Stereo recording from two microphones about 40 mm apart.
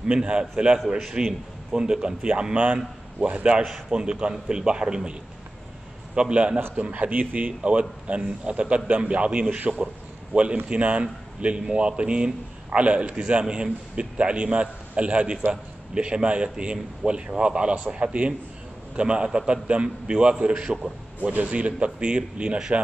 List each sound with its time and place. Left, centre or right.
0.1 s a man's voice: right
0.8 s a man's voice: centre
2.5 s a man's voice: right
3.9 s a man's voice: right
6.1 s a man's voice: right
6.8 s a man's voice: right
20.6 s a man's voice: centre
21.2 s a man's voice: right